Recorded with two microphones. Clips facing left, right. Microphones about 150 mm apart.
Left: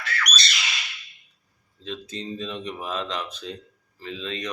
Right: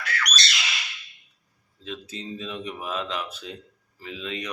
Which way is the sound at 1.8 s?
5° right (ahead or behind).